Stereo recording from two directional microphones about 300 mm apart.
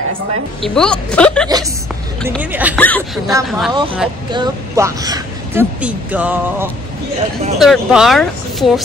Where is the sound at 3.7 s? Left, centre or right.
Centre.